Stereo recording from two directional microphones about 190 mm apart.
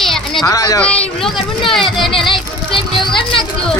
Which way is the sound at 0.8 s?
5° left (ahead or behind).